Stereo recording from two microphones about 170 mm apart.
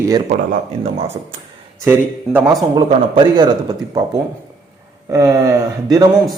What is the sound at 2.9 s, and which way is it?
A man's voice, 25° right (ahead or behind).